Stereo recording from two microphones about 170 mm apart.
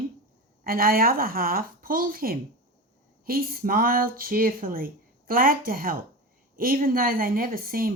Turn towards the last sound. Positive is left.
turn(degrees=-55)  # may be behind; listen again after turning